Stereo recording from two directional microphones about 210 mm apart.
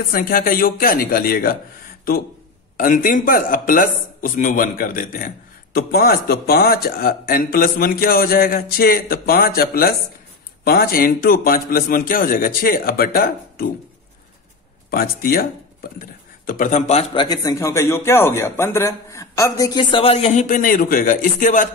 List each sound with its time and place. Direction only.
0.1 s a man's voice: 45° left (ahead or behind)
2.8 s a man's voice: 40° left (ahead or behind)
14.9 s a man's voice: 45° left (ahead or behind)